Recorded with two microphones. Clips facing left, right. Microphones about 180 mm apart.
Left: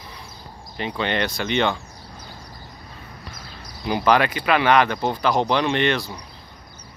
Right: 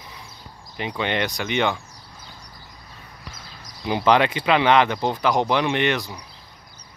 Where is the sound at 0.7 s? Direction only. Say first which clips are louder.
Left 1 dB; 15° right (ahead or behind).